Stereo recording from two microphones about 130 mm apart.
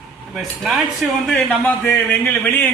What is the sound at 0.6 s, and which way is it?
A man's voice, centre (ahead or behind).